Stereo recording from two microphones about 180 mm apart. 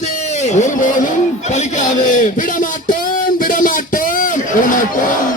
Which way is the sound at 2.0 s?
45° left (ahead or behind).